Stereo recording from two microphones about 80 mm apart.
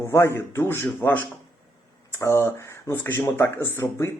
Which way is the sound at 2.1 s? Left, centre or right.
Left.